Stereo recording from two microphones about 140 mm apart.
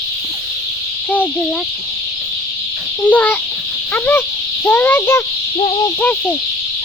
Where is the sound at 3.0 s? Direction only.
10° left (ahead or behind).